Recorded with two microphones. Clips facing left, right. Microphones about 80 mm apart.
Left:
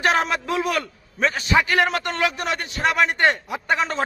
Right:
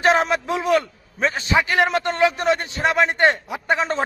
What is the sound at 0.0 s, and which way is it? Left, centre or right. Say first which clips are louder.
A man's voice: right 3 dB; right.